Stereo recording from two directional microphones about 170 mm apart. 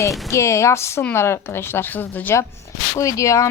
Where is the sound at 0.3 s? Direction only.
15° left (ahead or behind).